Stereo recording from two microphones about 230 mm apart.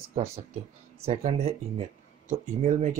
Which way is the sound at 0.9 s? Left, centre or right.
Right.